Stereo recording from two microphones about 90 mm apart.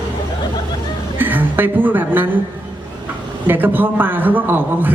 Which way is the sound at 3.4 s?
20° right (ahead or behind).